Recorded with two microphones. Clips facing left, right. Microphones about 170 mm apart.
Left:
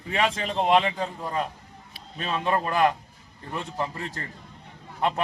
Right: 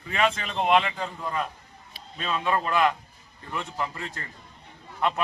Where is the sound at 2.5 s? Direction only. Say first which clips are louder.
Left 1 dB; 35° left (ahead or behind).